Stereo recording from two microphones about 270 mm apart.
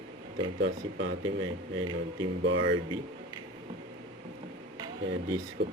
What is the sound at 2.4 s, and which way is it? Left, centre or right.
Speech, right.